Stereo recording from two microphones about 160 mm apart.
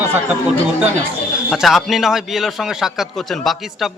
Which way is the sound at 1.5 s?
Centre (ahead or behind).